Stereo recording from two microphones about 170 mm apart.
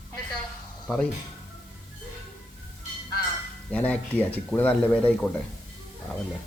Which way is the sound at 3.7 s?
10° left (ahead or behind).